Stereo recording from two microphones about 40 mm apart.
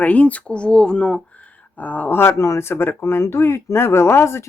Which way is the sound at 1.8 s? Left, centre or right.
Left.